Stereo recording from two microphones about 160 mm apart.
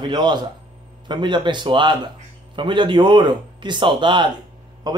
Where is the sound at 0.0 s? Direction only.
30° right (ahead or behind).